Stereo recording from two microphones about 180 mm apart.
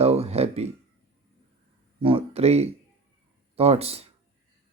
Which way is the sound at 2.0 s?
30° right (ahead or behind).